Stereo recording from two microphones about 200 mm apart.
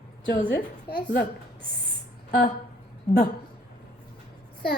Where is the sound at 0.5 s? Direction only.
55° left (ahead or behind).